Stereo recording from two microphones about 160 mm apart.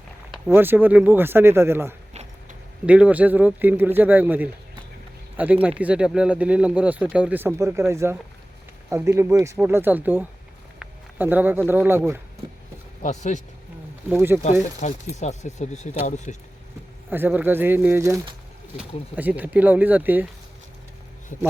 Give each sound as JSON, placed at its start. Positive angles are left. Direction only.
{"t": 0.5, "sound": "speech", "side_deg": -15}
{"t": 5.8, "sound": "speech", "side_deg": -5}
{"t": 13.0, "sound": "speech", "side_deg": 50}
{"t": 14.1, "sound": "speech", "side_deg": -10}
{"t": 15.1, "sound": "speech", "side_deg": 45}
{"t": 17.1, "sound": "speech", "side_deg": -10}